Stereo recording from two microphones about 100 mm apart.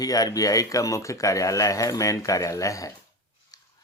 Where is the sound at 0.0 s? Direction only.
40° left (ahead or behind).